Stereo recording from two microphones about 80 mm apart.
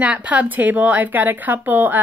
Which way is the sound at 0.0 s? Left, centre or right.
Centre.